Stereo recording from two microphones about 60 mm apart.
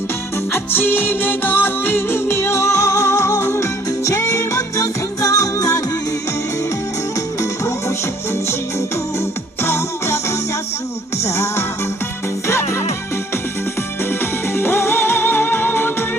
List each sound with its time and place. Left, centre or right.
0.5 s music: left
7.6 s music: left
9.6 s music: left
14.0 s music: left